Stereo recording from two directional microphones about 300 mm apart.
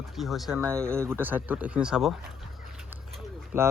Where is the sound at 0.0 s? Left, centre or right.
Centre.